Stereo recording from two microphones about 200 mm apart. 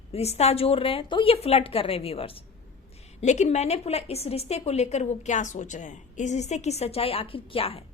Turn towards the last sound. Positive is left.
turn(degrees=30)  # may be behind; listen again after turning